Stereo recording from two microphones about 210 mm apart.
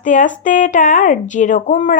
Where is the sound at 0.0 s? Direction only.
35° left (ahead or behind).